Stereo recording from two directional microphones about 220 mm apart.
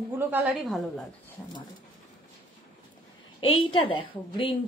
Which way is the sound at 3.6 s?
20° left (ahead or behind).